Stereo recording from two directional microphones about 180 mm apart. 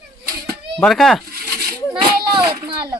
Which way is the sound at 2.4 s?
25° right (ahead or behind).